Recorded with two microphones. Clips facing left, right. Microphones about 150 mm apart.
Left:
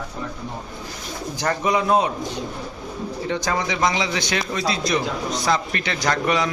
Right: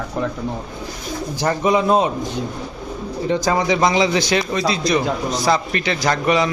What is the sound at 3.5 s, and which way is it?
Speech, 30° right (ahead or behind).